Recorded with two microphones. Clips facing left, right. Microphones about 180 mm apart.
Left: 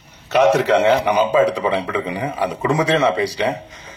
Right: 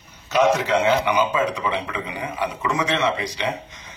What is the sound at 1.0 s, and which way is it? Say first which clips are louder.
Speech: left 6 dB; 35° left (ahead or behind).